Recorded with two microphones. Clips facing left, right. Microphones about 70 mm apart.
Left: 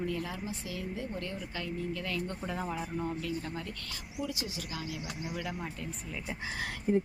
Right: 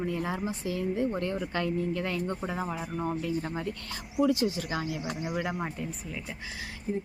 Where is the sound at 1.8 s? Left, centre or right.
Right.